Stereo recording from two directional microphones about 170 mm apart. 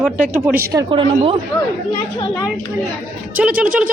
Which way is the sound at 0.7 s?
30° right (ahead or behind).